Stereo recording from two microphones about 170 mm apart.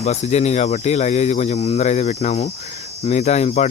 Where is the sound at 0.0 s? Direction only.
40° left (ahead or behind).